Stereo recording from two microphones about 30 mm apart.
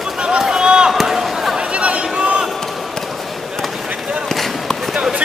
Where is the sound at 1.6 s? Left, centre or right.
Right.